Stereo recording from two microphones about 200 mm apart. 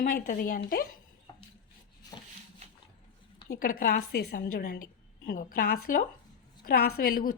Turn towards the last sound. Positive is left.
turn(degrees=45)  # may be behind; listen again after turning